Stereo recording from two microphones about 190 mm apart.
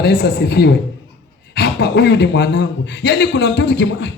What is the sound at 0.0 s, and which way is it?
A man's voice, 60° left (ahead or behind).